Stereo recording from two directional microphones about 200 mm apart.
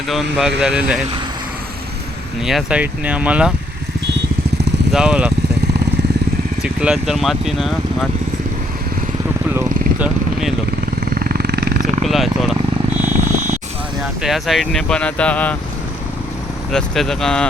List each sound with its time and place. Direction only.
0.1 s speech: centre (ahead or behind)
2.4 s speech: centre (ahead or behind)
4.9 s speech: 5° right (ahead or behind)
6.6 s speech: 5° right (ahead or behind)
9.6 s vehicle: 5° right (ahead or behind)
11.0 s wild animals: 45° right (ahead or behind)
12.0 s speech: centre (ahead or behind)
14.2 s speech: centre (ahead or behind)
16.7 s speech: centre (ahead or behind)